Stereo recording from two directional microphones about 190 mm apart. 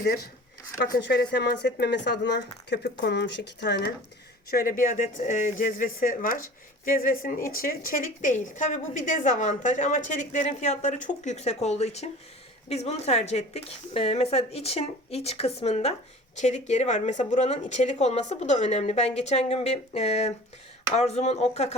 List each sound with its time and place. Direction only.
0.9 s speech: 60° left (ahead or behind)
4.5 s a woman's voice: 45° left (ahead or behind)